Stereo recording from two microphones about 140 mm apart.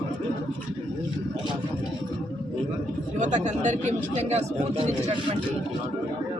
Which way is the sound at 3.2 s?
55° right (ahead or behind).